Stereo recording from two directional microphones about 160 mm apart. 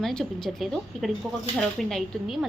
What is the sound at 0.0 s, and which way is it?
Speech, 5° left (ahead or behind).